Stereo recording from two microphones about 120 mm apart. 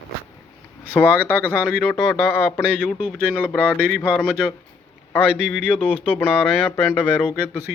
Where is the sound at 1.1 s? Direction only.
15° right (ahead or behind).